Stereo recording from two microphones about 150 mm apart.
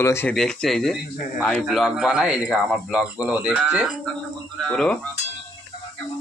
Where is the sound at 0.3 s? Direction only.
5° left (ahead or behind).